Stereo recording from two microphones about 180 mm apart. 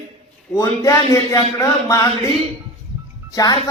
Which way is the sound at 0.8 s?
20° left (ahead or behind).